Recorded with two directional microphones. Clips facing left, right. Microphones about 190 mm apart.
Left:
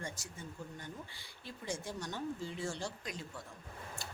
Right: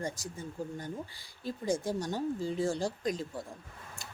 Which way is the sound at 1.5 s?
40° right (ahead or behind).